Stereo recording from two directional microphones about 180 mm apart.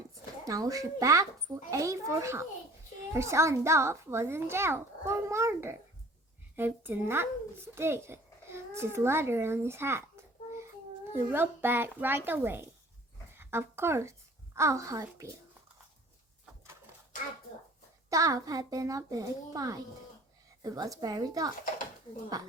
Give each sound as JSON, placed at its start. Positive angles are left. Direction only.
{"t": 0.4, "sound": "a child's voice", "side_deg": -20}
{"t": 11.1, "sound": "a child's voice", "side_deg": -10}
{"t": 18.1, "sound": "a child's voice", "side_deg": -20}